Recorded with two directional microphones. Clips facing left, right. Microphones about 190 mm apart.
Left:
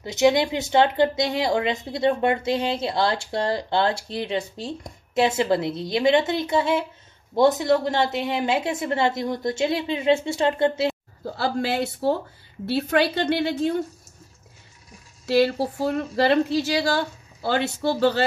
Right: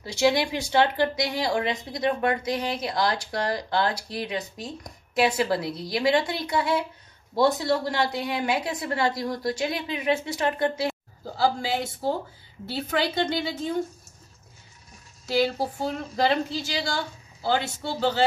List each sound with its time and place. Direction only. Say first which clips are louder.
0.0 s speech: left 4 dB; 20° left (ahead or behind)
11.3 s a woman's voice: left 1 dB; 65° left (ahead or behind)
16.5 s a woman's voice: left 7 dB; 65° left (ahead or behind)